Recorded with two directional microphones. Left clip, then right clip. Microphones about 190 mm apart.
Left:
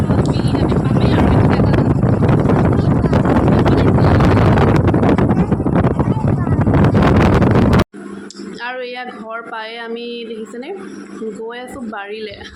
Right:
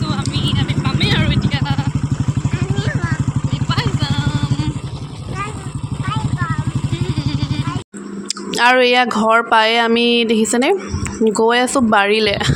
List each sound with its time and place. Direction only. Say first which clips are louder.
8.6 s speech: right 14 dB; 55° right (ahead or behind)